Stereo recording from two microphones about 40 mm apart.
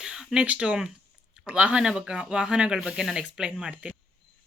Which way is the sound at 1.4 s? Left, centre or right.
Right.